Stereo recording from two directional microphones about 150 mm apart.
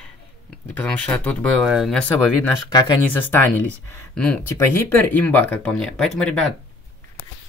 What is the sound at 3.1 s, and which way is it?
Speech, 10° left (ahead or behind).